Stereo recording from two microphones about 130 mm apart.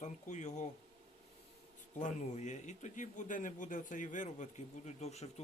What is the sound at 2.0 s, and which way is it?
A man's voice, 70° left (ahead or behind).